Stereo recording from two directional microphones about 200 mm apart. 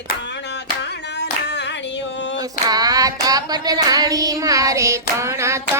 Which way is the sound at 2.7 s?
20° right (ahead or behind).